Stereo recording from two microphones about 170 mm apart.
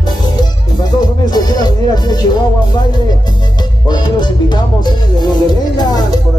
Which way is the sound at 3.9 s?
25° left (ahead or behind).